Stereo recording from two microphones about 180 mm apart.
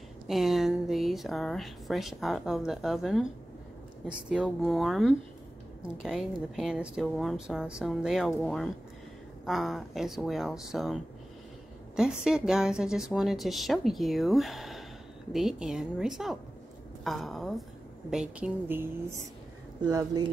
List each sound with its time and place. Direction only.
0.3 s a woman's voice: centre (ahead or behind); by 20.2 s 20° right (ahead or behind)